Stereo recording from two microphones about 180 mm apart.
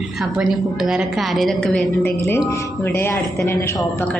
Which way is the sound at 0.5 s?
Centre (ahead or behind).